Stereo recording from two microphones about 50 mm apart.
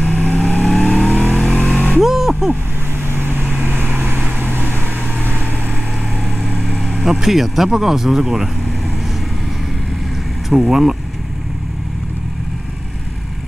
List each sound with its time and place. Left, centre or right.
0.0 s vehicle: left
0.7 s vehicle: centre
2.0 s music: centre
3.1 s vehicle: right
6.4 s vehicle: left
7.1 s speech: centre
10.5 s speech: centre